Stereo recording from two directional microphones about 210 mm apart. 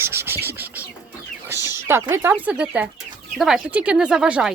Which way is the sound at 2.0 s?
10° right (ahead or behind).